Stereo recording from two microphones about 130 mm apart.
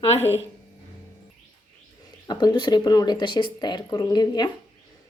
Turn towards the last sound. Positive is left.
turn(degrees=30)  # may be behind; listen again after turning